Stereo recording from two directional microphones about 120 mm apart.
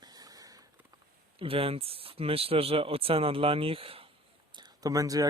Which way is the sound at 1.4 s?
50° right (ahead or behind).